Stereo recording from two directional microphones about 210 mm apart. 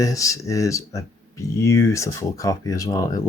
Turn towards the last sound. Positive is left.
turn(degrees=15)  # may be behind; listen again after turning